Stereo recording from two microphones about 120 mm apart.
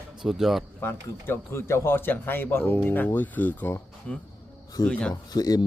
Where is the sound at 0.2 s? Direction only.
5° right (ahead or behind).